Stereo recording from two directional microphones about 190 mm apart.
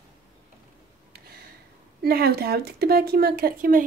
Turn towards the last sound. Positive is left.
turn(degrees=-50)  # may be behind; listen again after turning